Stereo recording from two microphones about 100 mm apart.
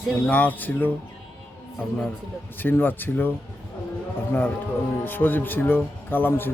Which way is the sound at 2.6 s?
20° left (ahead or behind).